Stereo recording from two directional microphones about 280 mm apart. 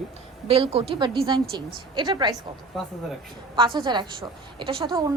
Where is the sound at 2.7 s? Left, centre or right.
Centre.